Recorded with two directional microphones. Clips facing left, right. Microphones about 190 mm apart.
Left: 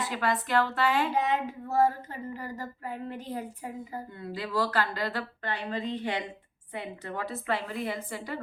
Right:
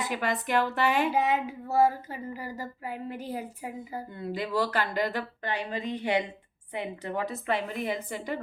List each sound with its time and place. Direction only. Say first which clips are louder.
0.1 s speech: even; 15° right (ahead or behind)
4.2 s a woman's voice: right 2 dB; 20° right (ahead or behind)